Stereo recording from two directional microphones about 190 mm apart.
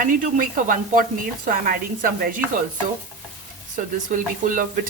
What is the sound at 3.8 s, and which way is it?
A woman's voice, 45° right (ahead or behind).